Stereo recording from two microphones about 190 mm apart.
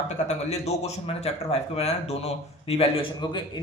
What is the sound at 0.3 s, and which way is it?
Speech, 35° left (ahead or behind).